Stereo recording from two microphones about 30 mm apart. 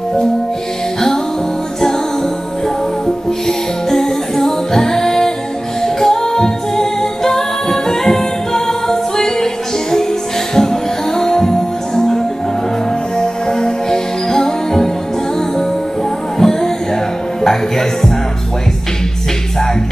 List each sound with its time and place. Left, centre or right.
3.4 s music: centre
13.2 s music: left
16.3 s music: centre